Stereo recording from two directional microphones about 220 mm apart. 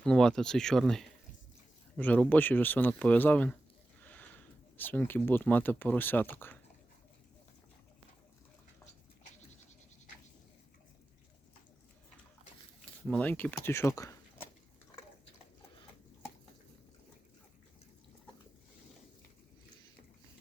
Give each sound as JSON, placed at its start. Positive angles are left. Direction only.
{"t": 0.0, "sound": "speech", "side_deg": 5}
{"t": 13.1, "sound": "speech", "side_deg": 5}